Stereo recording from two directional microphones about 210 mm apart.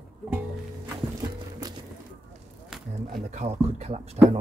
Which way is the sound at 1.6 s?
20° right (ahead or behind).